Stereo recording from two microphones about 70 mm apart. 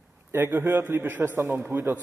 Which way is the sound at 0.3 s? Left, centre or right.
Right.